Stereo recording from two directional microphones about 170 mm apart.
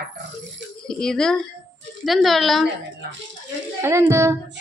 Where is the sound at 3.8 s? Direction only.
15° right (ahead or behind).